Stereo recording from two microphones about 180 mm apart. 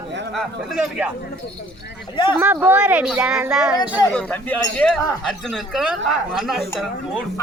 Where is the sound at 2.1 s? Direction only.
25° left (ahead or behind).